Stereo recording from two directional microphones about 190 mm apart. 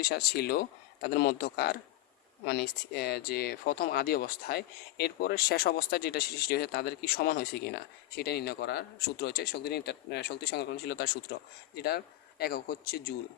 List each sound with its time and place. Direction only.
0.1 s speech: 55° left (ahead or behind)